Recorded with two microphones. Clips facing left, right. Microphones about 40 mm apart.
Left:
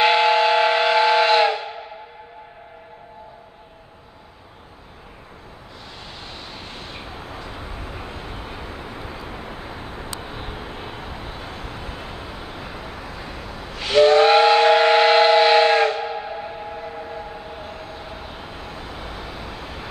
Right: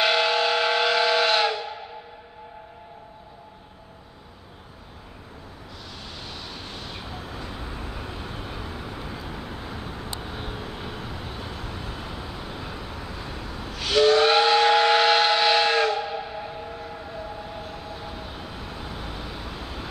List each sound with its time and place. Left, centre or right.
0.0 s steam whistle: left
6.2 s vehicle: left
7.5 s vehicle: left
13.4 s steam whistle: left
16.2 s a sound: left
16.7 s train: left
17.9 s vehicle: left